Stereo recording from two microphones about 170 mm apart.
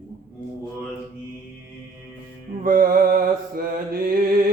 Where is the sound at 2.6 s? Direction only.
55° right (ahead or behind).